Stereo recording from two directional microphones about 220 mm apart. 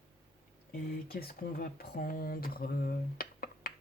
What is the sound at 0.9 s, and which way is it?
Speech, 45° left (ahead or behind).